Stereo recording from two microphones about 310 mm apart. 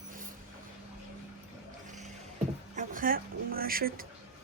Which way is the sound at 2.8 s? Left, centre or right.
Right.